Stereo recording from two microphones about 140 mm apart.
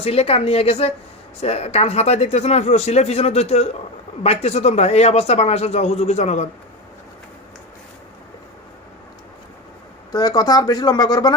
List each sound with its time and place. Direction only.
0.0 s speech: 45° left (ahead or behind)
10.1 s speech: 25° left (ahead or behind)